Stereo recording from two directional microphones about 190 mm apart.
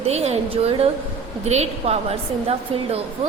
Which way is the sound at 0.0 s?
35° right (ahead or behind).